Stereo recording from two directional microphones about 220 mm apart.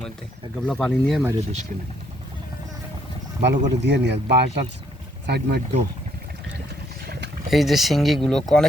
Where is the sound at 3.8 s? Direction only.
50° right (ahead or behind).